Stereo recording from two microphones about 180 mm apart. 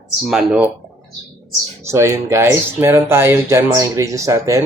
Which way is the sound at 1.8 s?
15° right (ahead or behind).